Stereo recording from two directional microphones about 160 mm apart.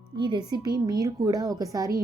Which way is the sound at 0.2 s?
30° right (ahead or behind).